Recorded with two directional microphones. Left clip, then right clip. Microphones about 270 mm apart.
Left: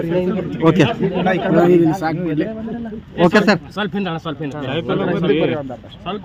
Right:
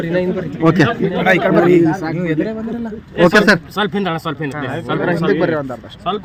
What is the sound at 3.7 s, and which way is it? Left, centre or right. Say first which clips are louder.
Speech: right 4 dB; right.